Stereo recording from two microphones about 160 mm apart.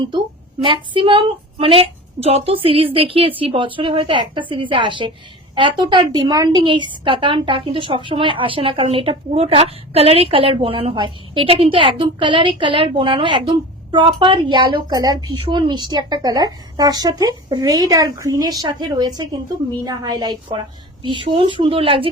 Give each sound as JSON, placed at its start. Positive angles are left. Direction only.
{"t": 0.6, "sound": "a woman's voice", "side_deg": -30}